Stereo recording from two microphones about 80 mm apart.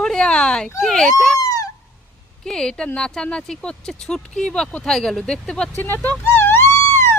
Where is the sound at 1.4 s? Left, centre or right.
Left.